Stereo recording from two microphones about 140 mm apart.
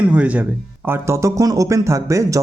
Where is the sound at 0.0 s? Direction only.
10° right (ahead or behind).